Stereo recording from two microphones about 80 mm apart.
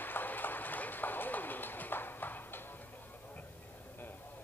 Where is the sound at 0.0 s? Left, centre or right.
Left.